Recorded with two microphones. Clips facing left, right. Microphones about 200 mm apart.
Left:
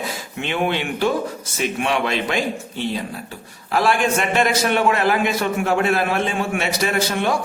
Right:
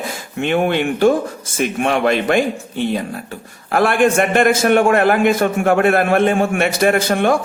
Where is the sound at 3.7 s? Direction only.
55° right (ahead or behind).